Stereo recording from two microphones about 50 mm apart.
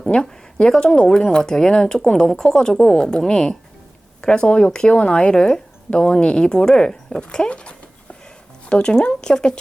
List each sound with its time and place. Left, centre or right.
0.1 s speech: centre